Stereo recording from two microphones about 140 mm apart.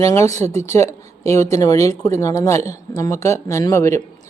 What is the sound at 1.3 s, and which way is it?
Speech, 20° left (ahead or behind).